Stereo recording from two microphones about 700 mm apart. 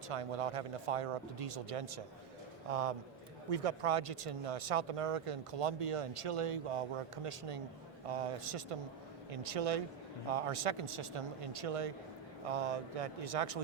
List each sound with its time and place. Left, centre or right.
0.1 s a man's voice: right